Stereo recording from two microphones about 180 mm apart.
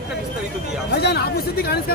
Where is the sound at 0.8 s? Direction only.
60° left (ahead or behind).